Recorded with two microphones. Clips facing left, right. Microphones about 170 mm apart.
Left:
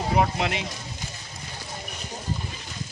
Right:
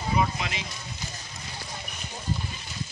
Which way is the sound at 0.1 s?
60° left (ahead or behind).